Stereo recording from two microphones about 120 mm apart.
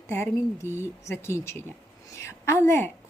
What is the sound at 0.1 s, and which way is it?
Speech, 20° left (ahead or behind).